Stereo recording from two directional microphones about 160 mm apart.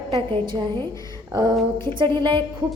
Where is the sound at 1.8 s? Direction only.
30° right (ahead or behind).